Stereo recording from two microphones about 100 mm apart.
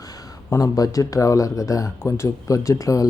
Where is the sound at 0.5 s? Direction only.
35° left (ahead or behind).